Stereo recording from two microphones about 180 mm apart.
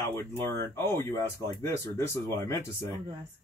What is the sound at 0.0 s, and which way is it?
Speech, 15° left (ahead or behind).